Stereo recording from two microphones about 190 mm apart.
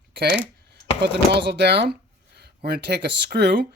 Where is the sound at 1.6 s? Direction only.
60° right (ahead or behind).